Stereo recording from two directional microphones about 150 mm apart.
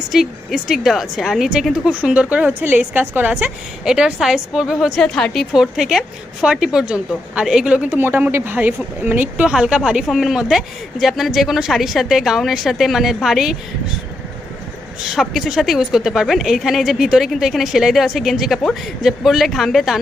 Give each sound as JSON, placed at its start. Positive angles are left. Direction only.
{"t": 0.1, "sound": "a woman's voice", "side_deg": 0}
{"t": 15.1, "sound": "a woman's voice", "side_deg": 0}